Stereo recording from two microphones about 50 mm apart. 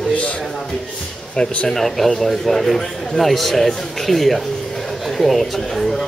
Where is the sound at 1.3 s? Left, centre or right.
Centre.